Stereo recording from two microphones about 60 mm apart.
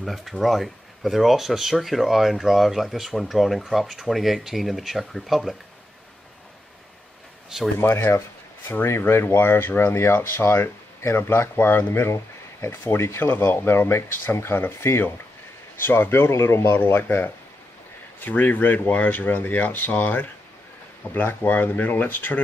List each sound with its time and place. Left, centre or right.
0.0 s speech: centre
7.4 s speech: centre
8.6 s speech: left